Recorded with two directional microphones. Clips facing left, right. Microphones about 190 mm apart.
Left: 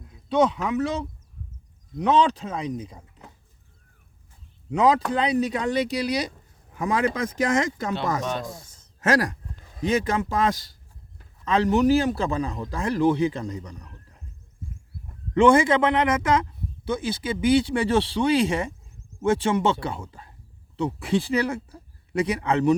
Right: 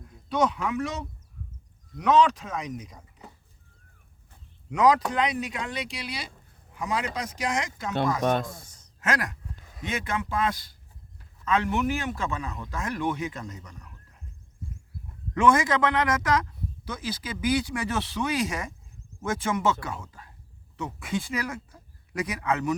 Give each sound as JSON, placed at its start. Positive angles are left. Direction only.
{"t": 0.3, "sound": "a man's voice", "side_deg": 30}
{"t": 4.7, "sound": "a man's voice", "side_deg": 30}
{"t": 6.8, "sound": "speech", "side_deg": 50}
{"t": 8.2, "sound": "speech", "side_deg": -55}
{"t": 9.0, "sound": "a man's voice", "side_deg": 40}
{"t": 15.4, "sound": "a man's voice", "side_deg": 30}